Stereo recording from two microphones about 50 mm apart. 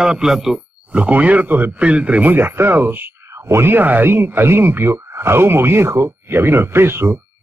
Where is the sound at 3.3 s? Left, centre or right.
Right.